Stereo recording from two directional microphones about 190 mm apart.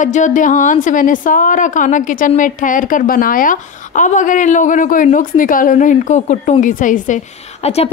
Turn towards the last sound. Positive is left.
turn(degrees=35)  # may be behind; listen again after turning